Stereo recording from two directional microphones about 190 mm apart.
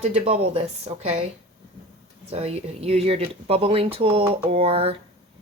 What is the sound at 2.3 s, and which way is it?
Speech, 30° right (ahead or behind).